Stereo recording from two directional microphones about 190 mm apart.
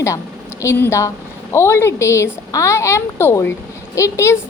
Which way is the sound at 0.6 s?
15° left (ahead or behind).